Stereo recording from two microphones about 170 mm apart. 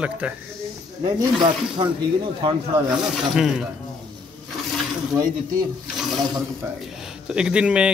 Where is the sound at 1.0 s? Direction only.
25° right (ahead or behind).